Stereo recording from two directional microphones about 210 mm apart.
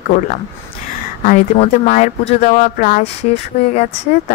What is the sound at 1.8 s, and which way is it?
Speech, 35° left (ahead or behind).